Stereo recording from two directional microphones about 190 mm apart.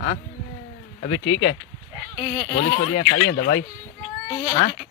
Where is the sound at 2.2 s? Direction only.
30° left (ahead or behind).